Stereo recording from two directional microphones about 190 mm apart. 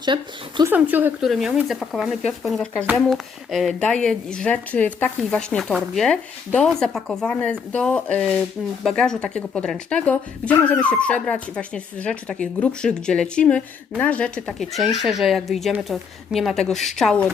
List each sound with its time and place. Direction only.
0.0 s speech: 25° right (ahead or behind)
0.7 s speech: 10° right (ahead or behind)